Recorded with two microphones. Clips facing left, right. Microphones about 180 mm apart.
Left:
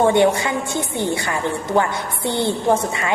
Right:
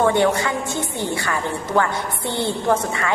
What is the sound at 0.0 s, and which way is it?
A woman's voice, 25° left (ahead or behind).